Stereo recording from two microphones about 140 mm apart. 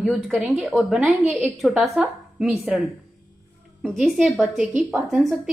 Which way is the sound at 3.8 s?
5° left (ahead or behind).